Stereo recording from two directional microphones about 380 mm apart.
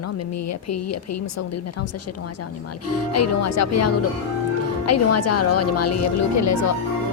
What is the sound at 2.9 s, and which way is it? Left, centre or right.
A woman's voice, left.